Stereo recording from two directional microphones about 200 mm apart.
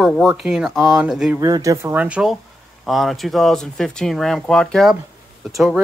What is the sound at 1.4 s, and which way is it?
Speech, 15° right (ahead or behind).